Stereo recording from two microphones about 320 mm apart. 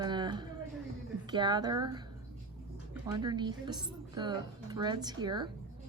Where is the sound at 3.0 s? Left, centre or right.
Centre.